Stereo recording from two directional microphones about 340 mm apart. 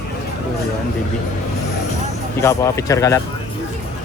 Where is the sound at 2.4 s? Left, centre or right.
Centre.